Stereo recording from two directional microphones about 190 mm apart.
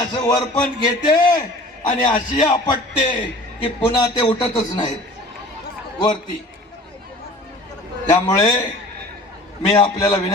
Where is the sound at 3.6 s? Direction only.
25° left (ahead or behind).